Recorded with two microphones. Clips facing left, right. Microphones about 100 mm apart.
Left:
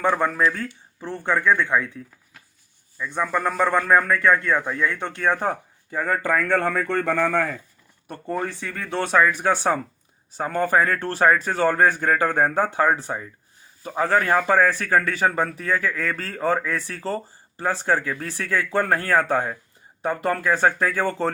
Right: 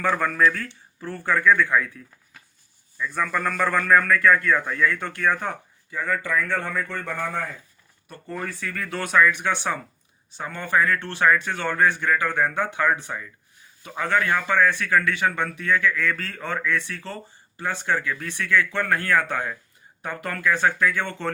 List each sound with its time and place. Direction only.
0.0 s speech: 20° left (ahead or behind)
3.0 s a man's voice: 20° left (ahead or behind); by 7.6 s 80° left
8.3 s a man's voice: 25° left (ahead or behind)